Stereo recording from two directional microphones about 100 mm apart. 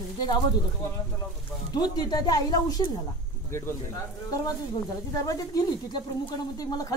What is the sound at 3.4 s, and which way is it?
Speech, 25° left (ahead or behind).